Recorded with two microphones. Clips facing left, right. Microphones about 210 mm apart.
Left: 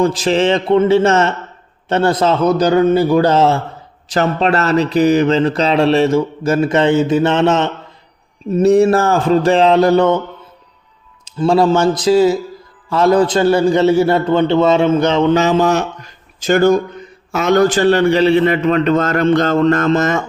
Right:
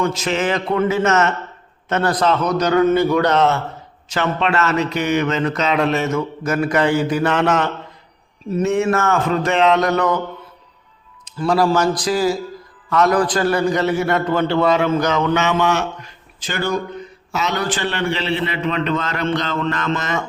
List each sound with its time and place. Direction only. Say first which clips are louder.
0.0 s speech: left 6 dB; 35° left (ahead or behind)
11.3 s a man's voice: left 4 dB; 25° left (ahead or behind); by 20.2 s 45° left (ahead or behind)